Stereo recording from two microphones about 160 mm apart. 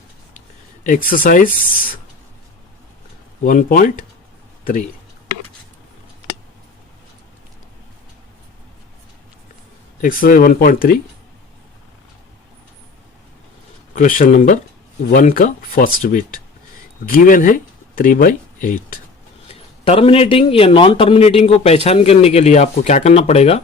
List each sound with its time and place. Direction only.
0.9 s speech: 60° left (ahead or behind)
3.4 s speech: 60° left (ahead or behind)
10.0 s speech: 60° left (ahead or behind)
13.9 s speech: 55° left (ahead or behind)
19.5 s a man's voice: 35° left (ahead or behind)